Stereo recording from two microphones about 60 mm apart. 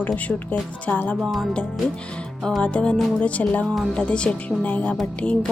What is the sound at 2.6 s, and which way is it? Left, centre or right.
Speech, centre.